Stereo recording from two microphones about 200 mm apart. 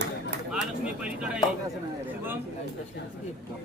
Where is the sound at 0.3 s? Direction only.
60° right (ahead or behind).